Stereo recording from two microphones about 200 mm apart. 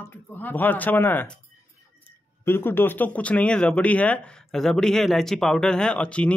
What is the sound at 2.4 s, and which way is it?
Speech, 10° left (ahead or behind).